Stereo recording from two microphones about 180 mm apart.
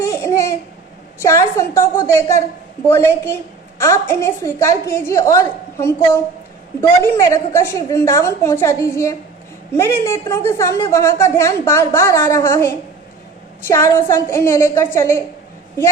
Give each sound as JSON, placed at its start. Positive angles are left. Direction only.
{"t": 0.0, "sound": "babbling", "side_deg": 15}
{"t": 1.2, "sound": "a woman's voice", "side_deg": 15}
{"t": 7.0, "sound": "a woman's voice", "side_deg": 15}